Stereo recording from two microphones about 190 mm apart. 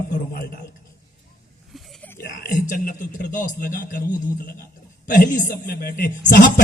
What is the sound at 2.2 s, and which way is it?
A man's voice, 50° left (ahead or behind).